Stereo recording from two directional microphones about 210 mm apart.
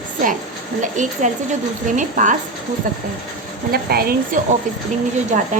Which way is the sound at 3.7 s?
45° right (ahead or behind).